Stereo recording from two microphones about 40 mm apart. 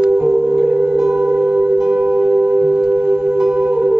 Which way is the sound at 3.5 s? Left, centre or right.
Right.